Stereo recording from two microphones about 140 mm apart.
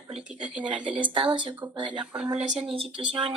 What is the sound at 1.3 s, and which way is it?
Speech, 35° right (ahead or behind).